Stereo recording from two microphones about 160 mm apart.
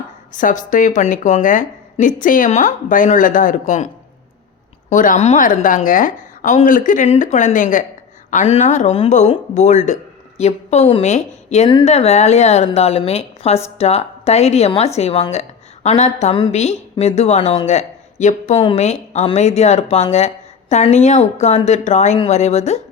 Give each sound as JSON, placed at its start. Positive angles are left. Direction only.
{"t": 0.3, "sound": "a woman's voice", "side_deg": 55}